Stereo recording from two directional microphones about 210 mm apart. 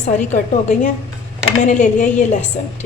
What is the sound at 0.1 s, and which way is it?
A woman's voice, 35° left (ahead or behind).